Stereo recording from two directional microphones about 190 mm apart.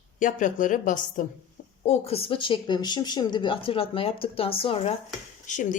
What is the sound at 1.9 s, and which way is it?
Speech, 30° left (ahead or behind).